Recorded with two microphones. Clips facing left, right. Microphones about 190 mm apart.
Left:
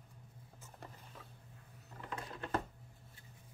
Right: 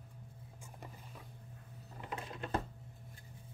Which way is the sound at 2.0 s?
20° right (ahead or behind).